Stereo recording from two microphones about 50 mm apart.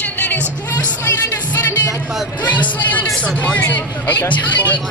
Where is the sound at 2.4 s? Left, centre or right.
Left.